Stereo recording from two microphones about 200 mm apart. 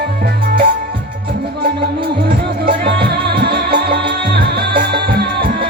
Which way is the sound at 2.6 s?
55° right (ahead or behind).